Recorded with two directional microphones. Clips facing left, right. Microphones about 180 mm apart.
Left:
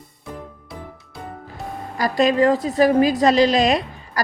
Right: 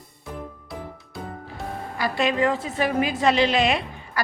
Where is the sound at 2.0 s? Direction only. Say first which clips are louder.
Left 6 dB; 40° left (ahead or behind).